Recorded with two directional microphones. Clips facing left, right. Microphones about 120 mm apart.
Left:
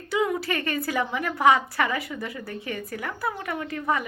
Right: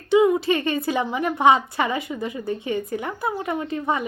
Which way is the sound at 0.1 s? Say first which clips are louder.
Right 8 dB; 20° right (ahead or behind).